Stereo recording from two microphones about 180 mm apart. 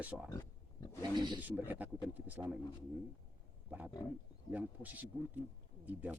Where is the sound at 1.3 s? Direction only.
10° right (ahead or behind).